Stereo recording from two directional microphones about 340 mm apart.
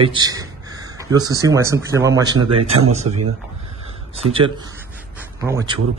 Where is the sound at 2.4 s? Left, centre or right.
Right.